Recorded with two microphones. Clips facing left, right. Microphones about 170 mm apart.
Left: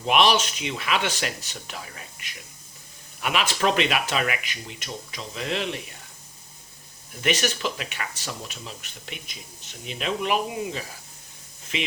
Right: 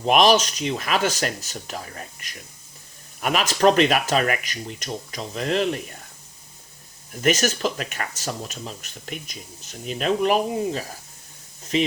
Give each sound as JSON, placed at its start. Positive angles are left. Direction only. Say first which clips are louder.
{"t": 0.0, "sound": "speech", "louder": "right 4 dB", "side_deg": -40}
{"t": 7.1, "sound": "speech", "louder": "right 4 dB", "side_deg": -40}